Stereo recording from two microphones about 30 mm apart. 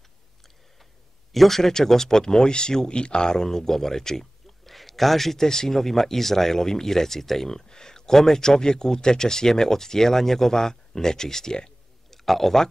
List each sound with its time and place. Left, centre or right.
1.3 s speech: centre; by 3.4 s left
3.4 s speech: centre
7.5 s speech: centre